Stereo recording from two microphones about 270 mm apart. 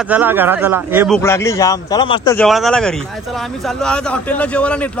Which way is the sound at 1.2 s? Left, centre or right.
Centre.